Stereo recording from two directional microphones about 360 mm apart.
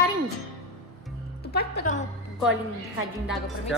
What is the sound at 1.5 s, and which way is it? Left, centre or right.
Speech, left.